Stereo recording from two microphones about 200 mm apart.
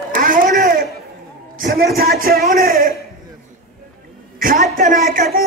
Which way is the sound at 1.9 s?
50° right (ahead or behind).